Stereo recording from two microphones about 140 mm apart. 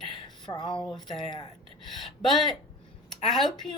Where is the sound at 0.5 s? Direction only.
35° left (ahead or behind).